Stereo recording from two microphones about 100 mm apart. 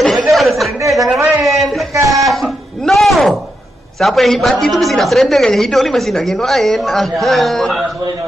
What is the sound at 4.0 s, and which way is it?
A woman's voice, centre (ahead or behind).